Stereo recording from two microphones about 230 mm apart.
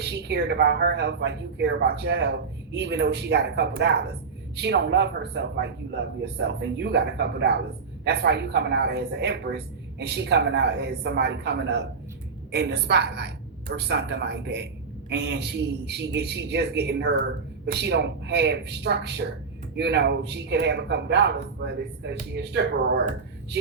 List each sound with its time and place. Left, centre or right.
0.0 s speech: right